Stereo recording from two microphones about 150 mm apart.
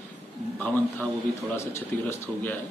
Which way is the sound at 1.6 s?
15° left (ahead or behind).